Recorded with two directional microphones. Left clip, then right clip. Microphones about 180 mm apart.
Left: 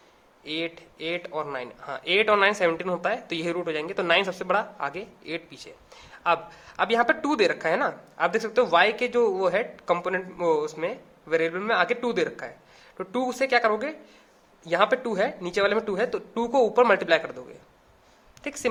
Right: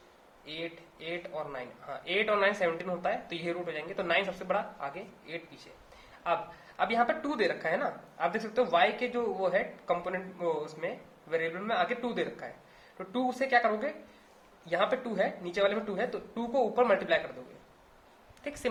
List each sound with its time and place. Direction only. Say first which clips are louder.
0.4 s a man's voice: left 9 dB; 55° left (ahead or behind)
18.4 s speech: left 5 dB; 45° left (ahead or behind)